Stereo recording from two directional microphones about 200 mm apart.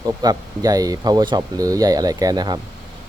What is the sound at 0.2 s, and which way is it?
Speech, 20° right (ahead or behind).